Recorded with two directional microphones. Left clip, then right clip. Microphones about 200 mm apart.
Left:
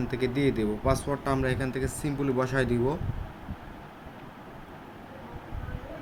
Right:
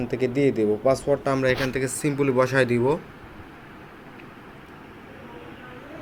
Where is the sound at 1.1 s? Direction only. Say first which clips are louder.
Right 7 dB; 15° right (ahead or behind).